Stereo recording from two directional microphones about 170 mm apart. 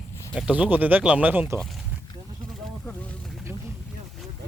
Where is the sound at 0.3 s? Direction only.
5° right (ahead or behind).